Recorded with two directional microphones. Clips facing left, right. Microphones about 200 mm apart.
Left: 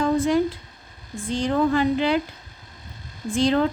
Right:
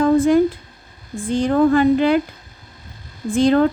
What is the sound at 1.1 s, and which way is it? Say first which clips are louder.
A woman's voice: right 5 dB; 50° right (ahead or behind).